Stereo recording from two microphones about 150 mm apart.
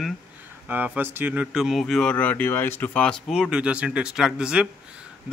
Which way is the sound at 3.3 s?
5° right (ahead or behind).